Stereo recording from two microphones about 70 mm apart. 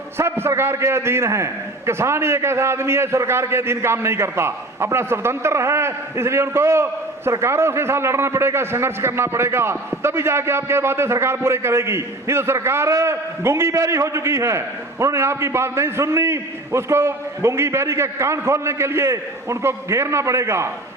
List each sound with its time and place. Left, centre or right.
0.2 s a man's voice: right